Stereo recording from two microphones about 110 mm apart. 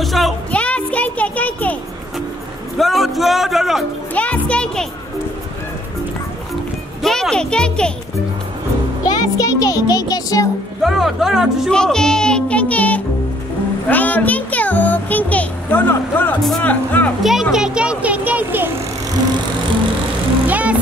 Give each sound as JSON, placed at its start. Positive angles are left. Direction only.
{"t": 0.0, "sound": "speech", "side_deg": 0}
{"t": 0.5, "sound": "music", "side_deg": 10}
{"t": 2.8, "sound": "speech", "side_deg": 0}
{"t": 4.1, "sound": "speech", "side_deg": 10}
{"t": 7.0, "sound": "a child's voice", "side_deg": 5}
{"t": 9.0, "sound": "a child's voice", "side_deg": 35}
{"t": 10.8, "sound": "a child's voice", "side_deg": 0}
{"t": 17.2, "sound": "a child's voice", "side_deg": 0}
{"t": 20.4, "sound": "music", "side_deg": -15}